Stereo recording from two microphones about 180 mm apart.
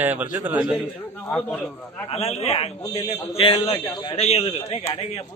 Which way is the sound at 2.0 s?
35° left (ahead or behind).